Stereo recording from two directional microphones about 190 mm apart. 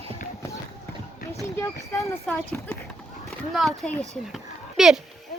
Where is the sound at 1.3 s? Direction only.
15° left (ahead or behind); by 5.0 s centre (ahead or behind).